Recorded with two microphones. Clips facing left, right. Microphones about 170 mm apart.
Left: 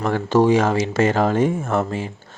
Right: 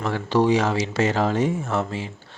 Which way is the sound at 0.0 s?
50° left (ahead or behind).